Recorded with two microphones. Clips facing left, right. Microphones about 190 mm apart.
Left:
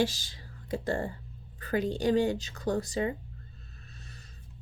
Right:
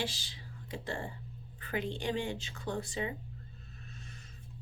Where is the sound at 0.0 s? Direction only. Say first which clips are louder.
Left 9 dB; 40° left (ahead or behind).